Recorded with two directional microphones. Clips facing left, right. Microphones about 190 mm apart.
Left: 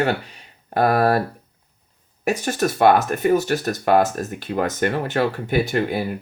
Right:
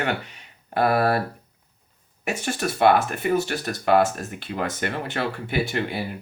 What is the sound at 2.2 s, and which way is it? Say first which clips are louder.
Speech: left 5 dB; 40° left (ahead or behind).